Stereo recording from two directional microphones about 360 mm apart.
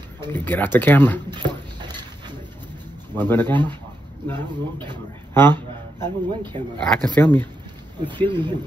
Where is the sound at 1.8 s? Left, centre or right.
Centre.